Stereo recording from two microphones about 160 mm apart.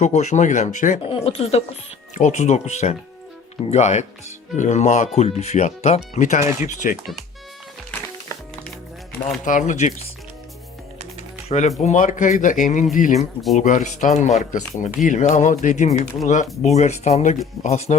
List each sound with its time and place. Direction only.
0.0 s speech: 45° left (ahead or behind)
1.0 s speech: 35° left (ahead or behind)
9.4 s speech: 50° left (ahead or behind)
11.4 s speech: 45° left (ahead or behind)